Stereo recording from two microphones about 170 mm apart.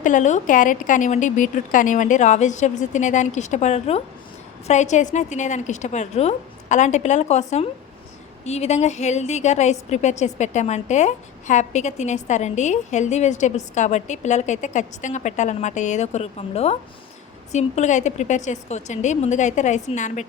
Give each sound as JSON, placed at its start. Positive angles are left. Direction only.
{"t": 0.0, "sound": "a woman's voice", "side_deg": 45}